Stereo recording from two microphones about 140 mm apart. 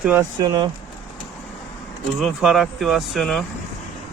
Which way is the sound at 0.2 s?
30° right (ahead or behind).